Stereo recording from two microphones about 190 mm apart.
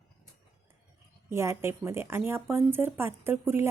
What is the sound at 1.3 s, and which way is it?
Speech, 15° right (ahead or behind).